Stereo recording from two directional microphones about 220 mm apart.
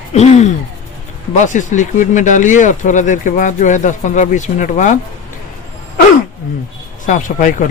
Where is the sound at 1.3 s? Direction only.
35° left (ahead or behind).